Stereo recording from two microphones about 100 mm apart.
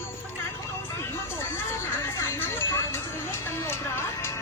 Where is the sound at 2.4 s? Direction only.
25° left (ahead or behind).